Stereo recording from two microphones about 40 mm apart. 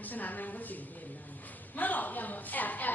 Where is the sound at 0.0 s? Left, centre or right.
Left.